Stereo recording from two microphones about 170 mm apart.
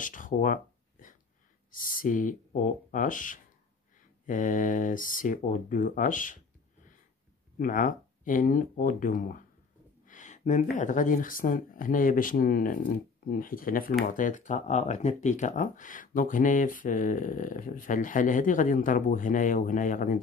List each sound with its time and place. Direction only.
0.0 s speech: 50° left (ahead or behind)
1.7 s speech: 55° left (ahead or behind)
7.5 s speech: 55° left (ahead or behind)